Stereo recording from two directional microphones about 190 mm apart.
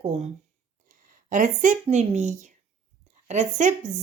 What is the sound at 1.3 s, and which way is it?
Speech, 40° right (ahead or behind).